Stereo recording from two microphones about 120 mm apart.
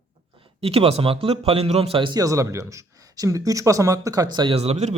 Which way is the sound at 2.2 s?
25° right (ahead or behind).